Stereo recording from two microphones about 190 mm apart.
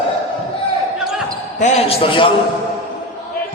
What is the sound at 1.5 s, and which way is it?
Speech, 35° left (ahead or behind).